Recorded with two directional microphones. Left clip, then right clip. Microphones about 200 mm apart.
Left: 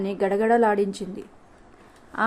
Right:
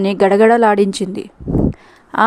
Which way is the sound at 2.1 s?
50° right (ahead or behind).